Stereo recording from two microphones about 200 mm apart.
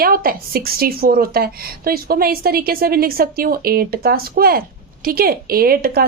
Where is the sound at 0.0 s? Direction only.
45° right (ahead or behind).